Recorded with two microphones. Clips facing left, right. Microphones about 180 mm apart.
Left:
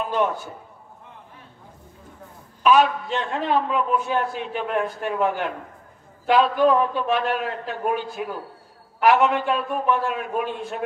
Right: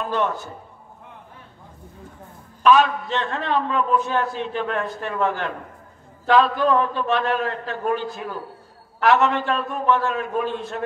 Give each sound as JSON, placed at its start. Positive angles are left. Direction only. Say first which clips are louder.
{"t": 0.0, "sound": "a man's voice", "louder": "left 1 dB", "side_deg": 10}
{"t": 2.6, "sound": "a man's voice", "louder": "right 1 dB", "side_deg": 10}